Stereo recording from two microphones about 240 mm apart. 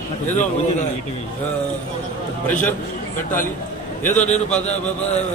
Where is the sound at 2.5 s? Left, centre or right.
Centre.